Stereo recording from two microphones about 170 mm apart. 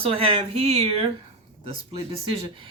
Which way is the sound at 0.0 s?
35° right (ahead or behind).